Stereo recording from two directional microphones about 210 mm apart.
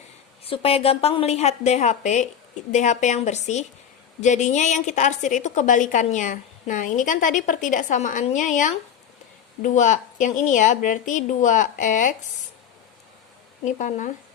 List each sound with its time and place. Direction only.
0.4 s a woman's voice: 25° left (ahead or behind)
13.7 s a woman's voice: 35° left (ahead or behind)